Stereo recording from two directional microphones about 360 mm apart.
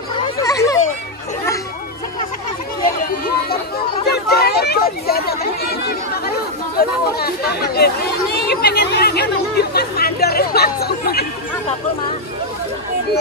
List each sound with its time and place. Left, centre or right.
0.4 s children playing: centre
4.0 s a sound: left
6.8 s speech: left